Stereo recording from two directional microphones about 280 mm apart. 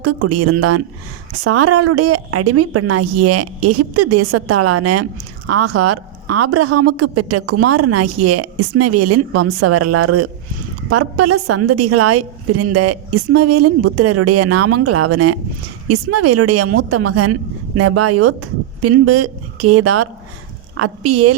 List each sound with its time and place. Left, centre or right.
0.0 s a woman's voice: right